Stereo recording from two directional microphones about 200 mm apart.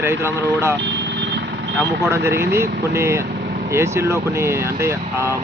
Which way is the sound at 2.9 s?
15° right (ahead or behind).